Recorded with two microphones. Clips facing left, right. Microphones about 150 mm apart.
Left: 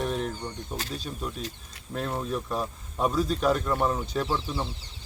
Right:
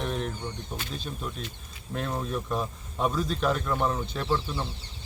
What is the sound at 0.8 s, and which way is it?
Speech, 40° left (ahead or behind).